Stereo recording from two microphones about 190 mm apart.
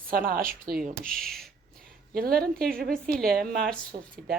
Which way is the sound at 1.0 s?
Centre (ahead or behind).